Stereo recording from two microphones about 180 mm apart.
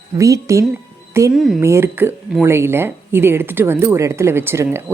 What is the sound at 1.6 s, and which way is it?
Speech, 15° right (ahead or behind).